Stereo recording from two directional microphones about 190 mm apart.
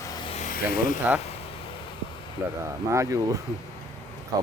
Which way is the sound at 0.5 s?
50° left (ahead or behind).